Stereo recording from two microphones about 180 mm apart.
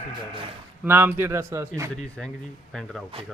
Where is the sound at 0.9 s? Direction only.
10° right (ahead or behind).